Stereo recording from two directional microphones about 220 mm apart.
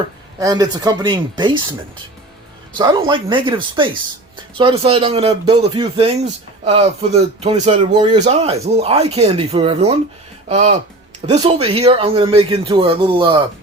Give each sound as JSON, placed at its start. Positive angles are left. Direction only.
{"t": 0.3, "sound": "speech", "side_deg": -15}
{"t": 2.7, "sound": "speech", "side_deg": -20}